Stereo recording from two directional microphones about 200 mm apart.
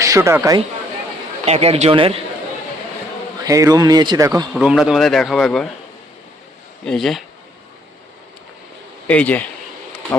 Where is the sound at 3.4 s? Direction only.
15° right (ahead or behind).